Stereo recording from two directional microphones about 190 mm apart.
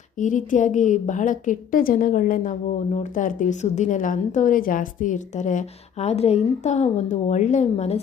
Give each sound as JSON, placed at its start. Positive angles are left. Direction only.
{"t": 0.2, "sound": "a woman's voice", "side_deg": 40}